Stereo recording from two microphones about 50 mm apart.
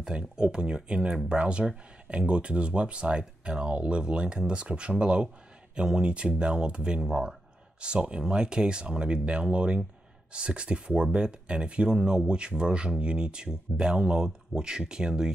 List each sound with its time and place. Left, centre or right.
0.0 s speech: centre